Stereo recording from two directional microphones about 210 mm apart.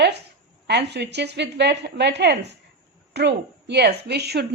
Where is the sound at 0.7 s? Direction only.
55° right (ahead or behind).